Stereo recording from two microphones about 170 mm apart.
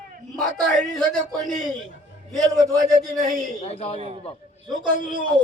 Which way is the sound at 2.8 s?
Centre (ahead or behind).